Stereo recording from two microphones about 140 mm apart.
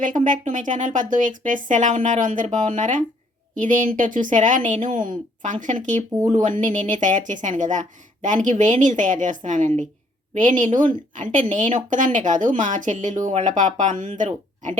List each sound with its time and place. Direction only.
0.0 s a woman's voice: 70° right (ahead or behind)